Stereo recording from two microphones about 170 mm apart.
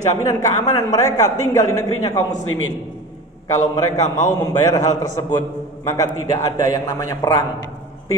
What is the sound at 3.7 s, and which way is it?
A man's voice, 20° left (ahead or behind).